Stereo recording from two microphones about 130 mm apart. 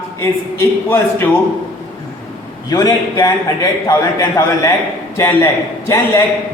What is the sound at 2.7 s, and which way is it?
A man's voice, 30° left (ahead or behind).